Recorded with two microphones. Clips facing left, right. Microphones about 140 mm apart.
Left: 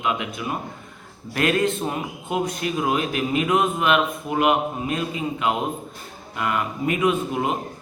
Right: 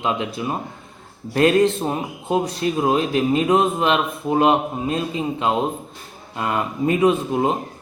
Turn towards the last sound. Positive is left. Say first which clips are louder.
# right 4 dB
turn(degrees=-30)  # may be behind; listen again after turning